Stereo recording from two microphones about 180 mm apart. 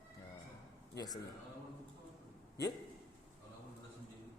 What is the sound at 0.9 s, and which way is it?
Speech, 20° left (ahead or behind).